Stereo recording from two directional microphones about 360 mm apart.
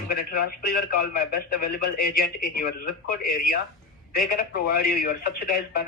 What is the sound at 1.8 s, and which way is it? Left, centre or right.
Speech, left.